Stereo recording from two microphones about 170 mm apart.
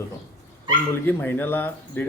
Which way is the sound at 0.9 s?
10° left (ahead or behind).